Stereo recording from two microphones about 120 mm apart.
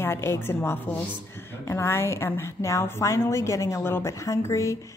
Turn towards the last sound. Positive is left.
turn(degrees=25)  # may be behind; listen again after turning